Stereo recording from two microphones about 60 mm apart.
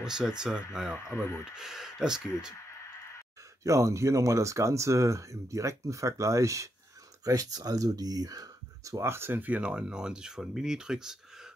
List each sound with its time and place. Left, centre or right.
0.0 s speech: centre
3.6 s speech: right
7.2 s speech: right
9.0 s speech: right
9.4 s speech: right